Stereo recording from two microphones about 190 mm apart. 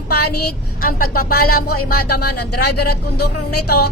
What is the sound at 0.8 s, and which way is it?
A woman's voice, 50° left (ahead or behind).